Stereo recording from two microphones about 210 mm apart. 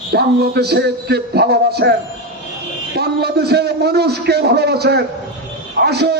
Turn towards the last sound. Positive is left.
turn(degrees=-50)  # may be behind; listen again after turning